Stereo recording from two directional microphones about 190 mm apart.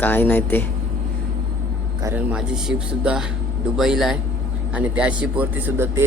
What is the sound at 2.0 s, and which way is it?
A man's voice, 10° right (ahead or behind).